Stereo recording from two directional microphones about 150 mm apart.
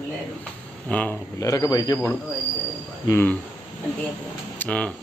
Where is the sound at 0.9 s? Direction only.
10° left (ahead or behind).